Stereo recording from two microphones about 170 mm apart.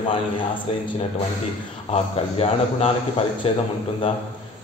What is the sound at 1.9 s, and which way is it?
A man's voice, 35° left (ahead or behind).